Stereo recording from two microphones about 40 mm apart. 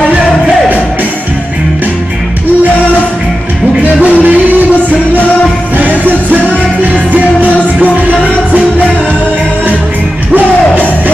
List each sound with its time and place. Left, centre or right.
4.0 s music: right
5.8 s music: right